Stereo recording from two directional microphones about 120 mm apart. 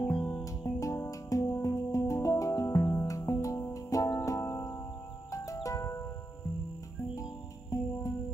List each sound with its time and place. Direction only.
0.2 s music: 35° left (ahead or behind)
7.7 s music: 30° left (ahead or behind)